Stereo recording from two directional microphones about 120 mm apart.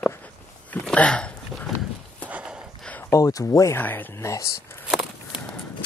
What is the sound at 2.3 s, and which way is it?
Horse, 10° right (ahead or behind).